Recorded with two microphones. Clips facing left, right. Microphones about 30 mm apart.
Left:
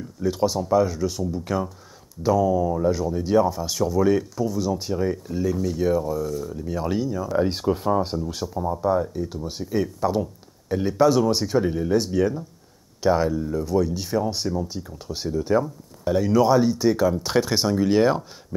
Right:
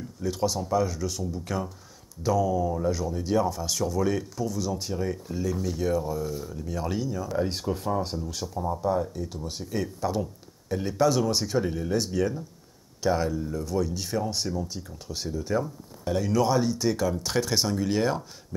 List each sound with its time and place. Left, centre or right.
0.2 s speech: centre
6.1 s speech: centre
6.5 s speech: centre